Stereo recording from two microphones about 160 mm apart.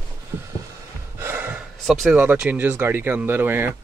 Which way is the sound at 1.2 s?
10° right (ahead or behind).